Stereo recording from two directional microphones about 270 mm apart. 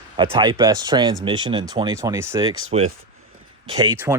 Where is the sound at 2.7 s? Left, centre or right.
Right.